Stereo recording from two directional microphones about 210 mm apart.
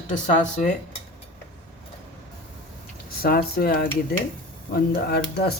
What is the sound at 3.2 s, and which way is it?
Speech, 45° left (ahead or behind).